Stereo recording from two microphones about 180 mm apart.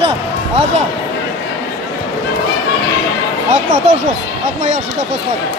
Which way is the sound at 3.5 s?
40° right (ahead or behind).